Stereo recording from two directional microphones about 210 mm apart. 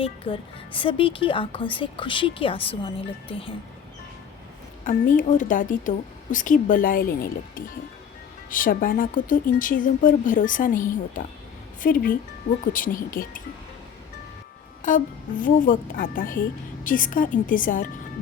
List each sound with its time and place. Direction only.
0.0 s speech: 25° left (ahead or behind)
4.9 s a woman's voice: 40° left (ahead or behind)
14.8 s music: 40° left (ahead or behind)
15.4 s a woman's voice: 40° left (ahead or behind)